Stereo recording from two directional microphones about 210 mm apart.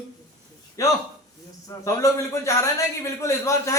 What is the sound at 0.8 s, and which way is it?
A man's voice, 15° left (ahead or behind).